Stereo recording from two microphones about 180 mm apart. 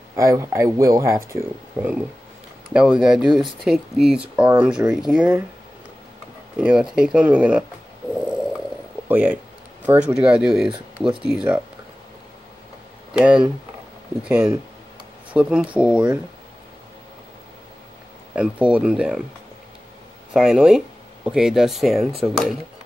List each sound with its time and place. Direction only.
0.1 s speech: 15° right (ahead or behind)
6.6 s speech: 5° right (ahead or behind)
8.1 s snoring: 5° right (ahead or behind)
9.1 s speech: 10° right (ahead or behind)
13.1 s speech: 5° right (ahead or behind)
18.3 s speech: 5° right (ahead or behind)
20.3 s speech: 5° right (ahead or behind)